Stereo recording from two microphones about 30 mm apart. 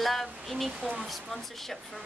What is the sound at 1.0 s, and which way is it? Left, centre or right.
Speech, centre.